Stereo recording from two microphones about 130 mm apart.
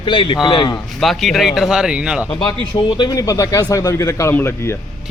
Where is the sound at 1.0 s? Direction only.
Centre (ahead or behind).